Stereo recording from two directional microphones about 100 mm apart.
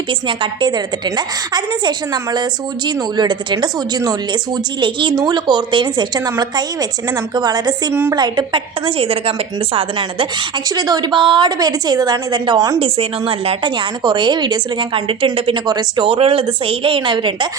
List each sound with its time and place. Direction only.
0.1 s a woman's voice: 55° right (ahead or behind)
9.0 s speech: 75° right (ahead or behind)
9.7 s a woman's voice: 60° right (ahead or behind)
10.8 s a woman's voice: 40° right (ahead or behind)
11.1 s a woman's voice: 55° right (ahead or behind); by 12.8 s 35° right (ahead or behind)
12.8 s a woman's voice: 70° right (ahead or behind)
15.6 s a woman's voice: 40° right (ahead or behind)
16.0 s a woman's voice: 65° right (ahead or behind)